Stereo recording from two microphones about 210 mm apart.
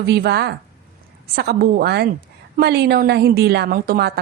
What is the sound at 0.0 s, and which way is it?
A woman's voice, 50° right (ahead or behind).